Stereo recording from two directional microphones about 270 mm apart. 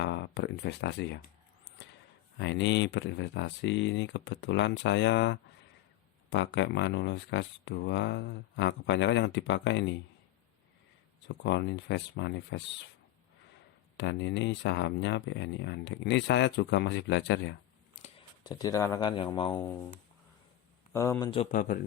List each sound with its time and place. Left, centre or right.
0.0 s speech: left
2.4 s speech: left
11.4 s speech: left
13.9 s speech: left
18.0 s speech: centre
20.9 s speech: centre
21.5 s speech: left